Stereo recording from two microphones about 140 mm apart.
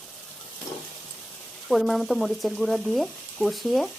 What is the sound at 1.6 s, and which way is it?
Speech, centre (ahead or behind).